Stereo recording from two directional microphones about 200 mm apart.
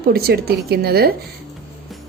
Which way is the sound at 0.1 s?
50° right (ahead or behind).